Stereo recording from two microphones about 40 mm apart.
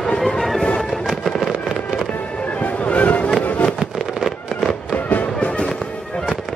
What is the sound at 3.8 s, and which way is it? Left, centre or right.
Fireworks, centre.